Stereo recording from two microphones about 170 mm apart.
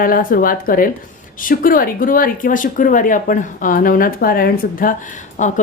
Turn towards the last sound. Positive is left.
turn(degrees=45)  # may be behind; listen again after turning